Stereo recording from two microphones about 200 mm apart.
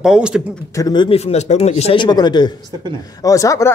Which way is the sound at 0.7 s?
20° left (ahead or behind).